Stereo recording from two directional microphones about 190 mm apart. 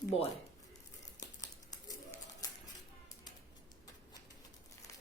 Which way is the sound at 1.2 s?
20° left (ahead or behind).